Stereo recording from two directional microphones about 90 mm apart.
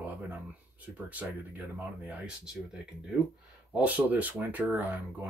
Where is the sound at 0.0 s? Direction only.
20° right (ahead or behind).